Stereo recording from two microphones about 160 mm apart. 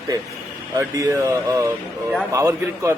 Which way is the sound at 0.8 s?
20° right (ahead or behind).